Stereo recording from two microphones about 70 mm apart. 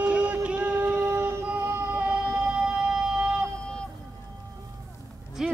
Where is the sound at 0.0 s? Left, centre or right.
Right.